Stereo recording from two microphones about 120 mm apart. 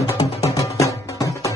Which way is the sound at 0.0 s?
30° left (ahead or behind).